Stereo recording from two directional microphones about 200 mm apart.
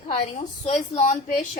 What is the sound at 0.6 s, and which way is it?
Speech, 35° left (ahead or behind).